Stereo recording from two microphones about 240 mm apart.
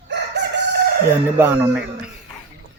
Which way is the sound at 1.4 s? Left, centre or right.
Centre.